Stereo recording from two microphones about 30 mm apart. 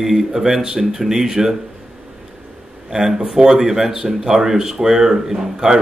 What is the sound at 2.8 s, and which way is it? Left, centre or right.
Speech, centre.